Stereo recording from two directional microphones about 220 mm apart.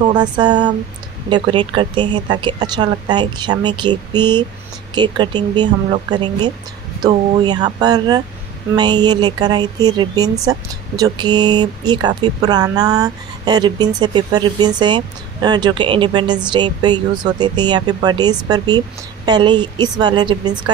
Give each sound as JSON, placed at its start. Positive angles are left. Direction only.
{"t": 0.1, "sound": "a woman's voice", "side_deg": -20}